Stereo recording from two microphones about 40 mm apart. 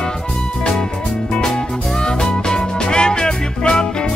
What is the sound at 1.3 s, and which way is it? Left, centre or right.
Music, centre.